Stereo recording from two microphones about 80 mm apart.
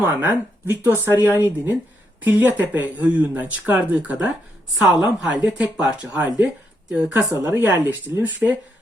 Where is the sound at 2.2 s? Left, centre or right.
Right.